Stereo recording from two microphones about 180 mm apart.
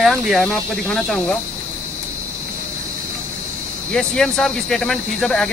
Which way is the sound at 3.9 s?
5° left (ahead or behind).